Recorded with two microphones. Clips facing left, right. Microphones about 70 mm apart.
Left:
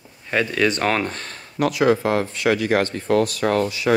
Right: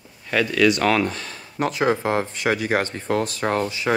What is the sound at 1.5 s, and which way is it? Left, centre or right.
Speech, right.